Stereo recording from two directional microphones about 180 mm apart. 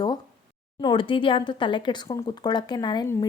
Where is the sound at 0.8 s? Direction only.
25° left (ahead or behind).